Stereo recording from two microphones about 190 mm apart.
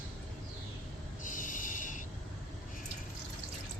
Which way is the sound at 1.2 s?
45° left (ahead or behind).